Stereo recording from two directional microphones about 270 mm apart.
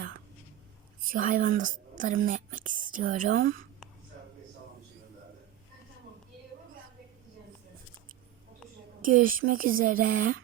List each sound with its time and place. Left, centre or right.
1.0 s speech: right
9.0 s a woman's voice: right